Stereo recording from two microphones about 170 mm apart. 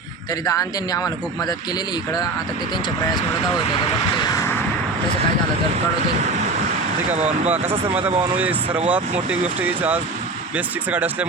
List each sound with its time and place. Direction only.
4.1 s vehicle: 20° left (ahead or behind)
7.1 s speech: 40° right (ahead or behind)
7.5 s speech: 10° right (ahead or behind)